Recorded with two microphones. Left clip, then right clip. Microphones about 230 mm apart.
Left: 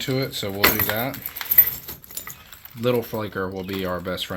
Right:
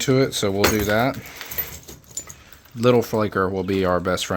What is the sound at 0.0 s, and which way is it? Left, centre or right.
Speech, right.